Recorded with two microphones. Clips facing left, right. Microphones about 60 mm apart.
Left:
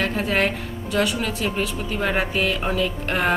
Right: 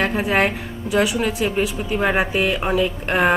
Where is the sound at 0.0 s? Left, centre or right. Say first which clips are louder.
Right 3 dB; centre.